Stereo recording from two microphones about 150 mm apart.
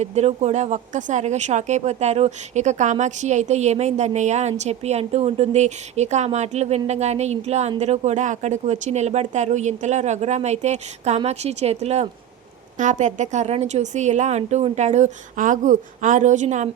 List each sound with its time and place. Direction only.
0.0 s speech: 45° right (ahead or behind)